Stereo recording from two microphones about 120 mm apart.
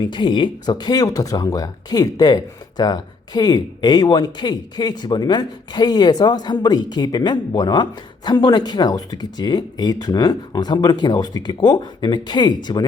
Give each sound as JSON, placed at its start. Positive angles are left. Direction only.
{"t": 0.0, "sound": "speech", "side_deg": 40}